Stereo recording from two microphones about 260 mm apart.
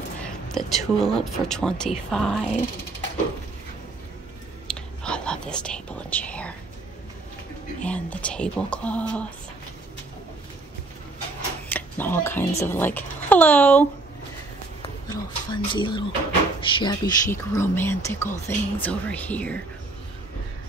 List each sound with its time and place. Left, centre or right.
0.2 s speech: centre
4.6 s whispering: centre
7.8 s speech: centre
11.7 s a child's voice: centre
15.0 s speech: centre